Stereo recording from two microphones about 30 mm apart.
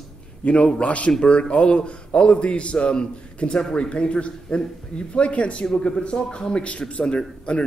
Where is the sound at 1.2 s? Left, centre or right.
Left.